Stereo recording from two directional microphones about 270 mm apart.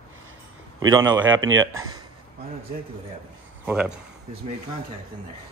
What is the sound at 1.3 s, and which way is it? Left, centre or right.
Speech, right.